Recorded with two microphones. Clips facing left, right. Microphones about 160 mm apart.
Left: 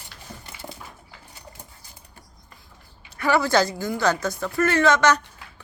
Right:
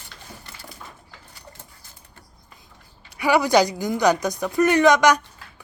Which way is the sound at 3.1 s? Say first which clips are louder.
Right 3 dB; 15° right (ahead or behind).